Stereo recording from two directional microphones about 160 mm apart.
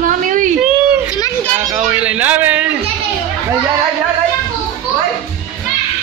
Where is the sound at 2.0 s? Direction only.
10° right (ahead or behind).